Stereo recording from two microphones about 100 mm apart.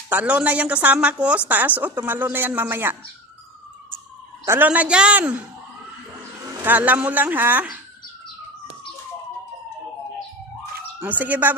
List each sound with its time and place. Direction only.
0.1 s a woman's voice: 15° right (ahead or behind)
4.6 s speech: 10° right (ahead or behind)
6.6 s speech: 15° right (ahead or behind)
11.0 s speech: 15° right (ahead or behind)